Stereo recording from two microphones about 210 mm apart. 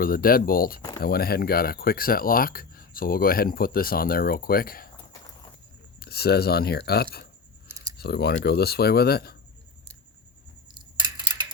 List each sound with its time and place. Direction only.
0.0 s speech: 45° left (ahead or behind)
6.0 s speech: 50° left (ahead or behind)
7.7 s a sound: 15° right (ahead or behind)
7.9 s speech: 50° left (ahead or behind)